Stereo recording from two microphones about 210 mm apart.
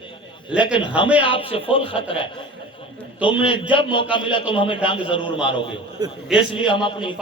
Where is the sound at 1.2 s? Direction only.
25° left (ahead or behind).